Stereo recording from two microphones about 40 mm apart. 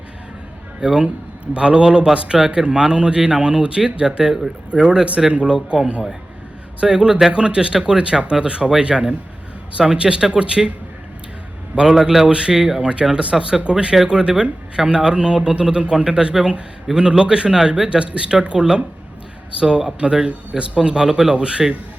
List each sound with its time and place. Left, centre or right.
0.8 s speech: centre
6.7 s speech: right
11.7 s a man's voice: right
12.8 s speech: right
17.8 s speech: right